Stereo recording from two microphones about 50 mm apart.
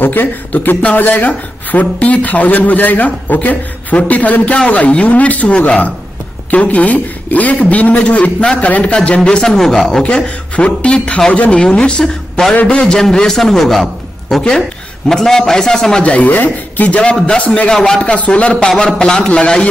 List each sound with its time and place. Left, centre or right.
0.0 s a man's voice: left; by 10.0 s centre
10.0 s a man's voice: left
16.0 s a man's voice: left
17.1 s a man's voice: centre
18.1 s a man's voice: left